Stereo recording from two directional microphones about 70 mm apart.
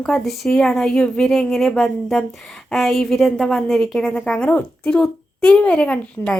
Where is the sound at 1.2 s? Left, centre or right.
Centre.